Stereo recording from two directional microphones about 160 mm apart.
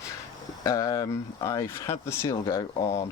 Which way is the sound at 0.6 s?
20° left (ahead or behind).